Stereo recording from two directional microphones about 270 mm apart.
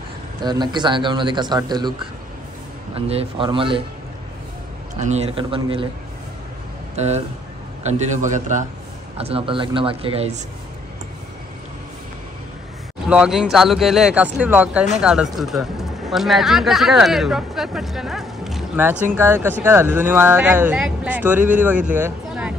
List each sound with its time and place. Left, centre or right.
0.4 s speech: centre
3.1 s speech: centre
4.9 s speech: right
7.0 s speech: right
13.1 s speech: centre
21.9 s a sound: centre